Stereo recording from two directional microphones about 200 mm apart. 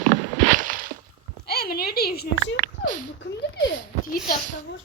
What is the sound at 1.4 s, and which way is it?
A woman's voice, 50° left (ahead or behind).